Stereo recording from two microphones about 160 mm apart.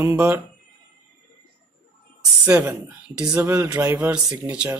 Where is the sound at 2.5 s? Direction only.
15° right (ahead or behind).